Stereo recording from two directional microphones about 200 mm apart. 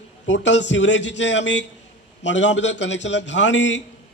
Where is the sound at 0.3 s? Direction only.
65° left (ahead or behind).